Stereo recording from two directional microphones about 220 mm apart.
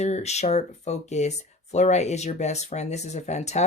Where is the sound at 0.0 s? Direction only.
30° left (ahead or behind).